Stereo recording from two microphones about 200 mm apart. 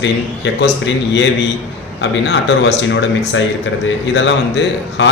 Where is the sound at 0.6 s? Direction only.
65° left (ahead or behind).